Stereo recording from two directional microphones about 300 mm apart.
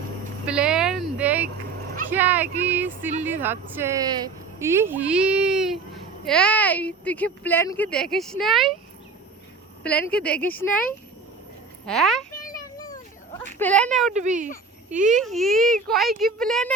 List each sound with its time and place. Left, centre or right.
0.4 s a sound: centre
2.0 s speech: centre
9.8 s speech: centre
11.9 s speech: centre
12.5 s a sound: centre
13.4 s speech: centre
14.1 s a child's voice: right
15.2 s speech: centre